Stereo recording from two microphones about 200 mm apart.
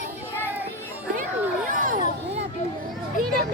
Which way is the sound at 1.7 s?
40° right (ahead or behind).